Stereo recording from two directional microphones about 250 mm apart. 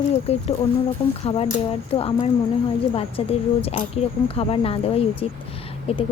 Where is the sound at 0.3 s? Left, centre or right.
Left.